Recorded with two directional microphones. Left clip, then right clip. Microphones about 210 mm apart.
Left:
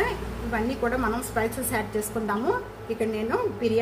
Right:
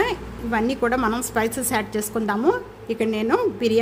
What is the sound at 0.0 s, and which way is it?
A woman's voice, 50° right (ahead or behind).